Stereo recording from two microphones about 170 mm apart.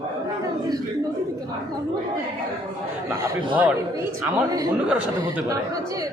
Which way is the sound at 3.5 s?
10° right (ahead or behind).